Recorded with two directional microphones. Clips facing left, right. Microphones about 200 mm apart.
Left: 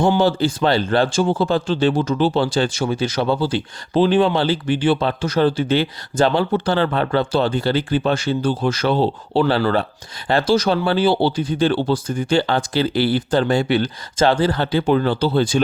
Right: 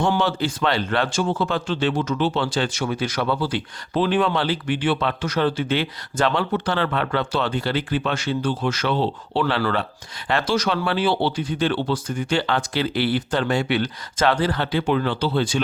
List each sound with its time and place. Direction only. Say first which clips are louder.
0.2 s speech: left 5 dB; 35° left (ahead or behind)